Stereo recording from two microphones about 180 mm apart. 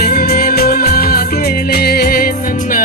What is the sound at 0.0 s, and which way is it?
Music, 50° left (ahead or behind).